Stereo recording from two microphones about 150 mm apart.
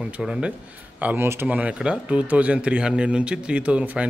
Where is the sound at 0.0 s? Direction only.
5° right (ahead or behind).